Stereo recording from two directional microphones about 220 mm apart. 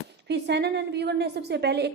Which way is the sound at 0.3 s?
50° right (ahead or behind).